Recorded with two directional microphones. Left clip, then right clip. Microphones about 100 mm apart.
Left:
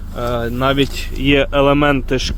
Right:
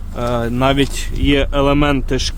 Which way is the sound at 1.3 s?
15° right (ahead or behind).